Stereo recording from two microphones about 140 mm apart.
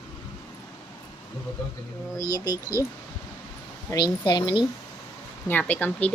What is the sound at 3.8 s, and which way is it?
Speech, 30° left (ahead or behind).